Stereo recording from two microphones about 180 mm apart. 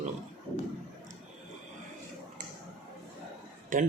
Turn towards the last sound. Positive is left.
turn(degrees=-50)  # may be behind; listen again after turning